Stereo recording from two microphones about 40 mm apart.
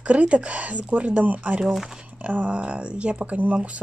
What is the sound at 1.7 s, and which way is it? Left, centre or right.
Speech, centre.